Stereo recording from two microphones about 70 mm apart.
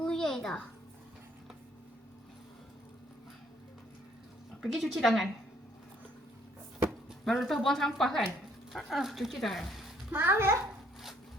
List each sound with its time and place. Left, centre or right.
0.0 s a sound: centre
4.6 s speech: centre
7.3 s speech: centre
10.1 s a child's voice: right